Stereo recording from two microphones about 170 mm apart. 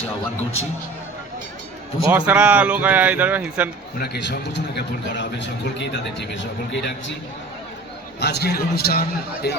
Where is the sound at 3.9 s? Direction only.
70° left (ahead or behind); by 6.9 s 90° left.